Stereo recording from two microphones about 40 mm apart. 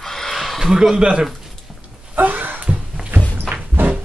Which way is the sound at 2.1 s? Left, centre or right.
Right.